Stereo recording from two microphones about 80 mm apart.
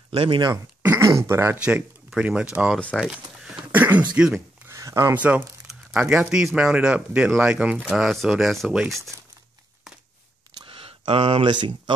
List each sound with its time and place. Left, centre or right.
0.1 s speech: right
1.0 s speech: right
2.1 s speech: centre
3.0 s a sound: centre
3.7 s throat clearing: right
4.1 s speech: centre
4.6 s a sound: right
5.1 s speech: centre
7.9 s speech: centre
9.1 s crumpling: right
10.5 s a sound: right